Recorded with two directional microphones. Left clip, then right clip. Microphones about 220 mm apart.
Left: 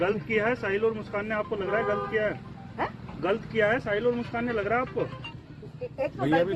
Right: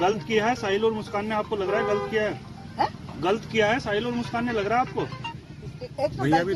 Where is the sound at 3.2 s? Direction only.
50° right (ahead or behind).